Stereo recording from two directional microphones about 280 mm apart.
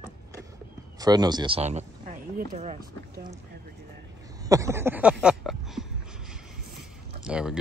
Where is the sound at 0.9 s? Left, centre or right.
Centre.